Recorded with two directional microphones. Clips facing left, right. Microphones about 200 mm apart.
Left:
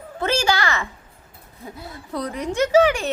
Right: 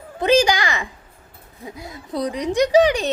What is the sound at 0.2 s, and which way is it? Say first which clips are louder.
A woman's voice: right 5 dB; 15° right (ahead or behind).